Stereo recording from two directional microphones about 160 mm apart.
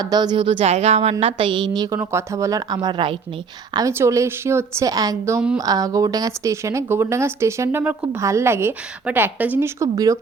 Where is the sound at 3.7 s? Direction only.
20° right (ahead or behind).